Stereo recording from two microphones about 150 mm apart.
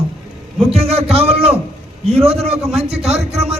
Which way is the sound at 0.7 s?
40° right (ahead or behind).